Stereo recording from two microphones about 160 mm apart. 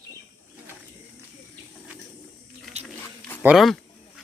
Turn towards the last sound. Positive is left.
turn(degrees=0)  # may be behind; listen again after turning